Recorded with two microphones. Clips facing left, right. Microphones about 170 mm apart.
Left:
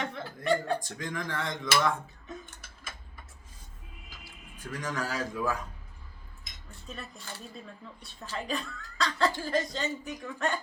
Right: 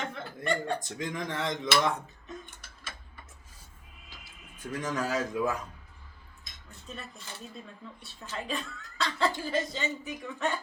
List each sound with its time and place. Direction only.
0.0 s speech: centre (ahead or behind)
0.8 s speech: 20° right (ahead or behind)
4.5 s speech: 20° right (ahead or behind)
6.8 s speech: centre (ahead or behind)
8.3 s speech: centre (ahead or behind)